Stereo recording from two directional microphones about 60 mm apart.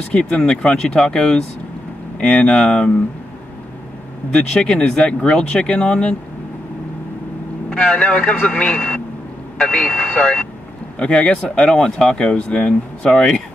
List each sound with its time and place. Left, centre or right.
0.1 s speech: centre
4.3 s speech: centre
7.7 s speech: centre